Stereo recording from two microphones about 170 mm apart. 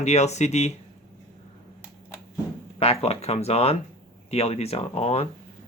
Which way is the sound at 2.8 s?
35° left (ahead or behind).